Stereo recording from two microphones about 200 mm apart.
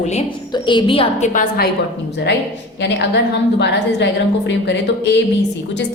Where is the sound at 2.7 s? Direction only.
60° left (ahead or behind).